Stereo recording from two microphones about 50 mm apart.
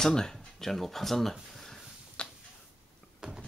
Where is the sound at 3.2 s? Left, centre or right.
Centre.